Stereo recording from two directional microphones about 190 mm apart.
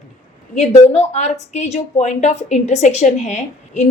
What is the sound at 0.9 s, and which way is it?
A woman's voice, 35° left (ahead or behind).